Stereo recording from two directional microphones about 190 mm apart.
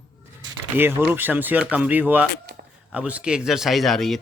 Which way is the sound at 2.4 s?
55° right (ahead or behind).